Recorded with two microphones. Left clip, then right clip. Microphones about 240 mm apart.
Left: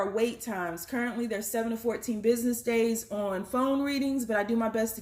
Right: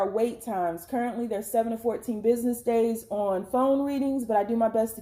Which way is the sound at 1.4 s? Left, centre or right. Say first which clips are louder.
Right 5 dB; left.